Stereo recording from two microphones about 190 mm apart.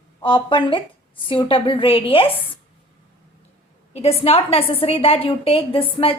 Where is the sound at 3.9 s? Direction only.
30° left (ahead or behind).